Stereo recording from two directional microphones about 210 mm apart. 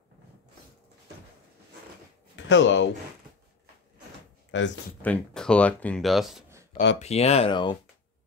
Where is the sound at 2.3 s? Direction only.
60° left (ahead or behind).